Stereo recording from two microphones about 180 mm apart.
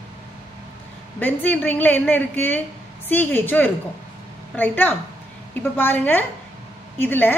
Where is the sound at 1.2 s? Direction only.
10° left (ahead or behind).